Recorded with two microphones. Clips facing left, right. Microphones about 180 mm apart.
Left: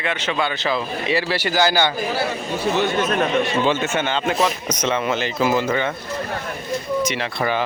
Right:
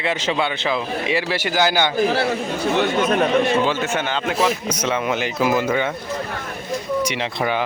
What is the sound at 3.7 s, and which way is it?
Speech, 5° right (ahead or behind).